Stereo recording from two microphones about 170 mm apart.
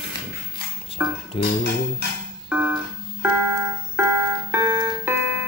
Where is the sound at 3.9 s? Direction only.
15° right (ahead or behind).